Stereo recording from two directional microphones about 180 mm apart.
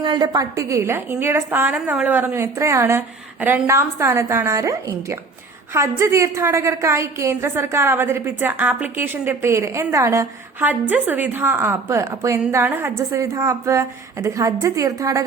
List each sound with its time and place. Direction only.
0.0 s a woman's voice: 25° right (ahead or behind)